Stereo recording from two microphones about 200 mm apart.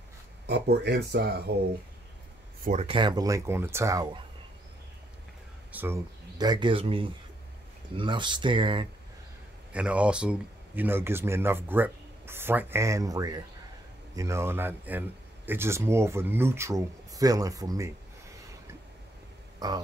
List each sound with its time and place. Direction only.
0.5 s speech: 55° right (ahead or behind)
2.6 s speech: 35° right (ahead or behind); by 4.2 s 20° right (ahead or behind)
5.7 s speech: 10° right (ahead or behind)
6.3 s speech: 20° right (ahead or behind)
9.7 s speech: 5° right (ahead or behind)
19.6 s speech: 20° right (ahead or behind)